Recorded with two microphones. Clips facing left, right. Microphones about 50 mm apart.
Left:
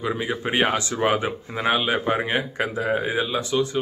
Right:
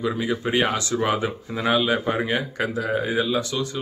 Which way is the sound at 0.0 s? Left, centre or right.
Left.